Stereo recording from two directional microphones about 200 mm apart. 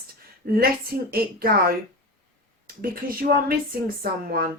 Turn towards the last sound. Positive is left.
turn(degrees=-50)  # may be behind; listen again after turning